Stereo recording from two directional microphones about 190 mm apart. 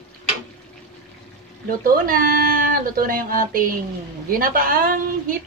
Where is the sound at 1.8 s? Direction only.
50° right (ahead or behind).